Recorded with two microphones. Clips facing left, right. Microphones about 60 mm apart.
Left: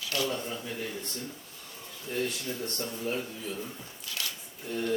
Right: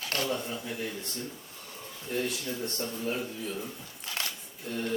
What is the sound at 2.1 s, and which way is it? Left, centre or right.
Speech, centre.